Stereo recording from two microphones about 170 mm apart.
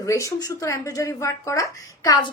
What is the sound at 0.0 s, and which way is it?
Speech, 20° left (ahead or behind).